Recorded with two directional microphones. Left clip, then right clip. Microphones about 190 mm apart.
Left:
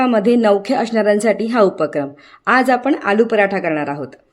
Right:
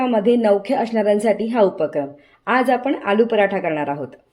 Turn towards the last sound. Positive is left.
turn(degrees=10)  # may be behind; listen again after turning